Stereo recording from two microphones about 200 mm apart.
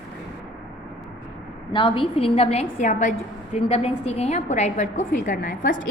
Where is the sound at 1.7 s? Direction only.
25° left (ahead or behind); by 5.8 s 40° left (ahead or behind).